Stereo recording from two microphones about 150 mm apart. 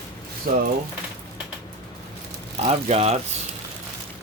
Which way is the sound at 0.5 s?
90° right.